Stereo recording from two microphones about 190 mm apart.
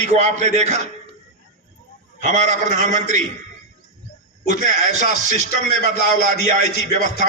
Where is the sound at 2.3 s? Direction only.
40° right (ahead or behind).